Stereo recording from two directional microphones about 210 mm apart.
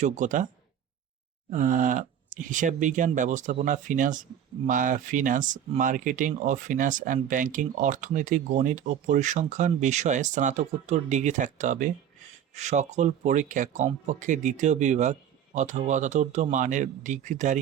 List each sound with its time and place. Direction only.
0.0 s speech: 35° right (ahead or behind)
1.5 s speech: 35° right (ahead or behind)